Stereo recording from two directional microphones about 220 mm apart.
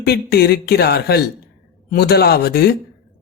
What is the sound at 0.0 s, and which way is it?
Speech, 45° left (ahead or behind).